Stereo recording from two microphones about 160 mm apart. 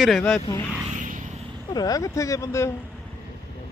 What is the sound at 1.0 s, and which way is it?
Vehicle, 55° right (ahead or behind).